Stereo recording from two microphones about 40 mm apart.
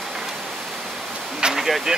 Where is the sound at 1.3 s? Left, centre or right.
Centre.